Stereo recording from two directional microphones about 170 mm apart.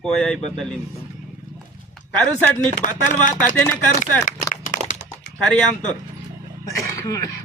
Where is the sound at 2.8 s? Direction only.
50° left (ahead or behind).